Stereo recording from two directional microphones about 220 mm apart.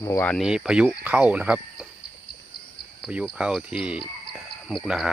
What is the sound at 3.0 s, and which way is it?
Speech, centre (ahead or behind).